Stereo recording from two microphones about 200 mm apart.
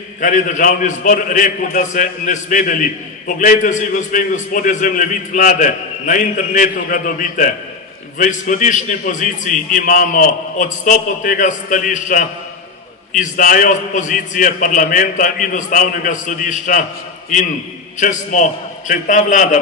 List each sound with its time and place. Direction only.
0.2 s a man's voice: 40° left (ahead or behind)
17.9 s a man's voice: 40° left (ahead or behind)